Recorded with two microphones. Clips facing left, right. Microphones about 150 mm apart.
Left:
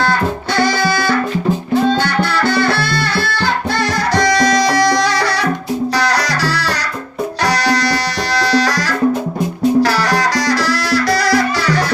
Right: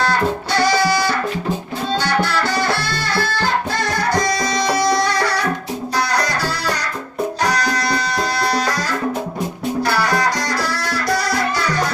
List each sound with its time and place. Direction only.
2.6 s music: 65° left (ahead or behind); by 6.7 s 90° left
7.4 s music: 80° left